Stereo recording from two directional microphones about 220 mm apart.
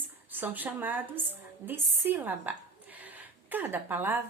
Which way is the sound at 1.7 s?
10° right (ahead or behind).